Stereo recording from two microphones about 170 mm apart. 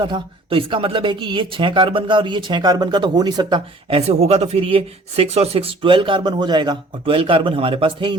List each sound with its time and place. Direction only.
0.0 s speech: 30° right (ahead or behind)